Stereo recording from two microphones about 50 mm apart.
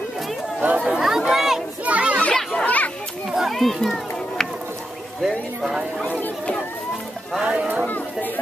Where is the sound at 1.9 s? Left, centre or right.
Right.